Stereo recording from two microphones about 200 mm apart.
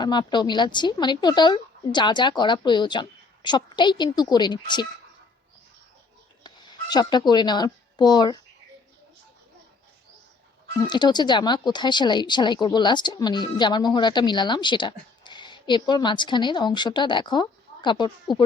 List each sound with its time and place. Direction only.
0.0 s speech: 20° left (ahead or behind)
6.4 s a woman's voice: 20° left (ahead or behind)
10.8 s speech: 20° left (ahead or behind)